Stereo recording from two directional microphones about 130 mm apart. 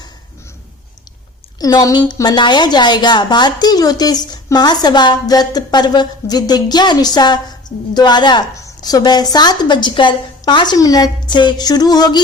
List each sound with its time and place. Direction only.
1.5 s a woman's voice: 30° left (ahead or behind)